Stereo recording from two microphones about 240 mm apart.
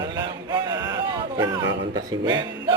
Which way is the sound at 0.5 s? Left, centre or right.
Centre.